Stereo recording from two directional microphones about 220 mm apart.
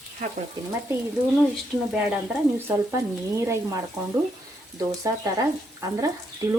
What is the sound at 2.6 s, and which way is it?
Speech, 15° right (ahead or behind).